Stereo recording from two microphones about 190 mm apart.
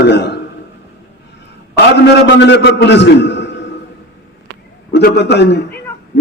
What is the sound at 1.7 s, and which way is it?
A man's voice, 65° left (ahead or behind).